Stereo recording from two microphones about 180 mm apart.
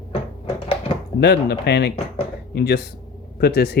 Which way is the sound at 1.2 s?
65° left (ahead or behind).